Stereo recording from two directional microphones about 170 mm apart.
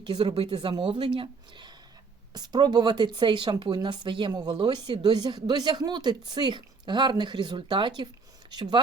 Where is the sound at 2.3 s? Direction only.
25° right (ahead or behind).